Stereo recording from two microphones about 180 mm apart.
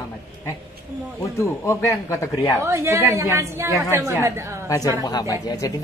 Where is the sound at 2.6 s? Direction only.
15° right (ahead or behind).